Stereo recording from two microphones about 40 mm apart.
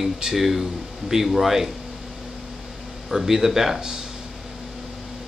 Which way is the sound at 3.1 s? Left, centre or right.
Centre.